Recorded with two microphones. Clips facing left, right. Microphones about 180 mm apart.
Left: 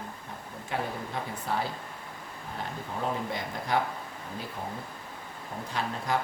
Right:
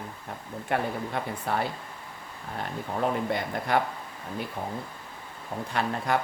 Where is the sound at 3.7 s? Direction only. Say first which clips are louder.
Right 2 dB; 60° right (ahead or behind).